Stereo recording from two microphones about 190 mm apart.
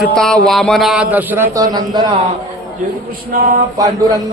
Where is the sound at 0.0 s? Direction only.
Centre (ahead or behind); by 2.1 s 20° right (ahead or behind).